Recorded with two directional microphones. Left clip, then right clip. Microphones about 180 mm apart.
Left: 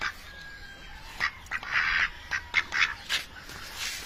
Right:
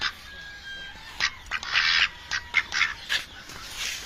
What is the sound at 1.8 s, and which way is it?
Duck, 25° left (ahead or behind).